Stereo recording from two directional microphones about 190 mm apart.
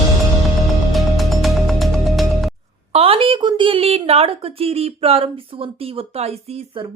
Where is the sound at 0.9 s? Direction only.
Centre (ahead or behind).